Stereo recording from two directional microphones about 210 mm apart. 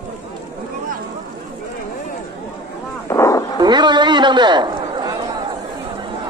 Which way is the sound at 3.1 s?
15° left (ahead or behind).